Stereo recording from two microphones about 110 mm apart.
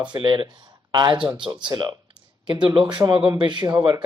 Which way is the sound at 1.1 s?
10° right (ahead or behind).